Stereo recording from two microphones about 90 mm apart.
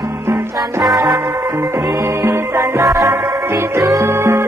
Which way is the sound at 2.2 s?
30° right (ahead or behind).